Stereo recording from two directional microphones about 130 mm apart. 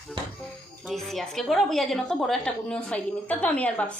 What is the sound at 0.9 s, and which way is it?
A woman's voice, centre (ahead or behind).